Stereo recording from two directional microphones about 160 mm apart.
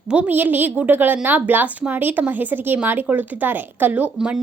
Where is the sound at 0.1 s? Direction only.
10° right (ahead or behind).